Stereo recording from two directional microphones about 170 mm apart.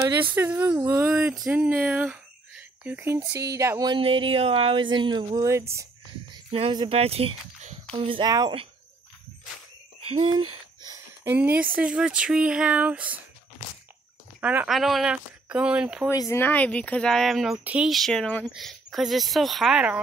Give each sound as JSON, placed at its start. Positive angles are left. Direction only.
{"t": 0.3, "sound": "speech", "side_deg": -10}
{"t": 6.3, "sound": "speech", "side_deg": -30}
{"t": 10.0, "sound": "speech", "side_deg": -30}
{"t": 11.2, "sound": "speech", "side_deg": -10}
{"t": 14.4, "sound": "speech", "side_deg": -10}
{"t": 16.1, "sound": "speech", "side_deg": 15}